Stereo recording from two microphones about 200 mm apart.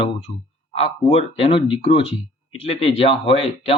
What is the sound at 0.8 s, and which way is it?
Speech, 30° left (ahead or behind).